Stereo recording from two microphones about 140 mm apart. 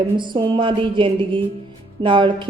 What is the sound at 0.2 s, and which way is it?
A woman's voice, 35° right (ahead or behind).